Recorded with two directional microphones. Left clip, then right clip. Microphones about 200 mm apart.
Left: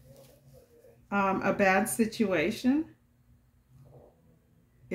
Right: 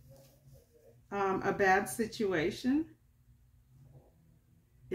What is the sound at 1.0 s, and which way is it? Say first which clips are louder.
Speech: left 5 dB; 35° left (ahead or behind).